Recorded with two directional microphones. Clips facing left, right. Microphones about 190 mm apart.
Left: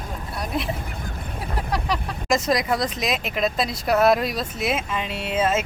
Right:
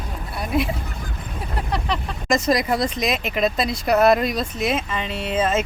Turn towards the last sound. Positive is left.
turn(degrees=5)  # may be behind; listen again after turning